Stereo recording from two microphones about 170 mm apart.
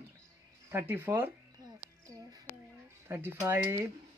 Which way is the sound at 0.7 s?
15° right (ahead or behind).